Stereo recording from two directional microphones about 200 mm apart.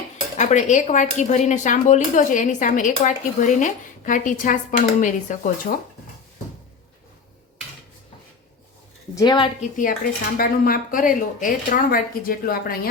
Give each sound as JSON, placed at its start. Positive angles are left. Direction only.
{"t": 0.3, "sound": "speech", "side_deg": 40}
{"t": 9.1, "sound": "a woman's voice", "side_deg": 20}
{"t": 9.6, "sound": "a woman's voice", "side_deg": 40}